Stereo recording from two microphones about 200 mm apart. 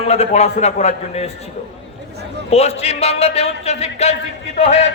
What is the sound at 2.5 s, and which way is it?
A man's voice, 30° left (ahead or behind).